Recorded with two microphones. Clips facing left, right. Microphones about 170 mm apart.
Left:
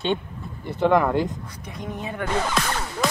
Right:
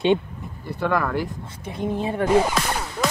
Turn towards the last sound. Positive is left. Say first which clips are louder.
# even
turn(degrees=0)  # may be behind; listen again after turning